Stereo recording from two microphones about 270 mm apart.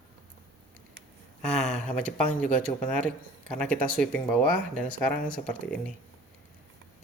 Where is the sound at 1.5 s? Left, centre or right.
Left.